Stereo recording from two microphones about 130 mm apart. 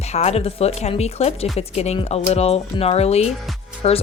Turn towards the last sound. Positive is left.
turn(degrees=50)  # may be behind; listen again after turning